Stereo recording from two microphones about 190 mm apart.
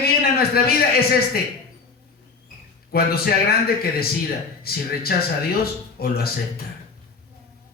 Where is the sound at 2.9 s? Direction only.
55° left (ahead or behind).